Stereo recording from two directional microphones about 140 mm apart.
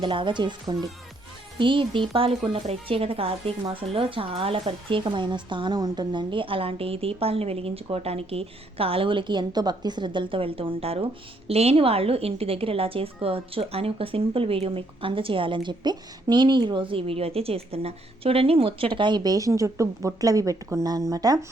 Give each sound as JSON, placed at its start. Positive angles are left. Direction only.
{"t": 0.0, "sound": "speech", "side_deg": -35}